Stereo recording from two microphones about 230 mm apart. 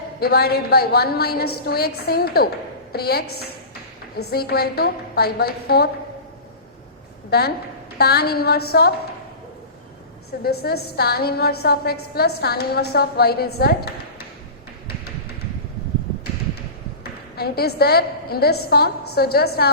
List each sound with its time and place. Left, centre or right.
0.2 s a woman's voice: left
7.3 s a woman's voice: left
10.4 s a woman's voice: left
17.0 s a woman's voice: left